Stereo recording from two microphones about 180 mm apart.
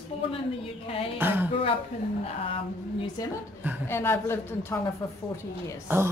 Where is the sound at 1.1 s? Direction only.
10° right (ahead or behind).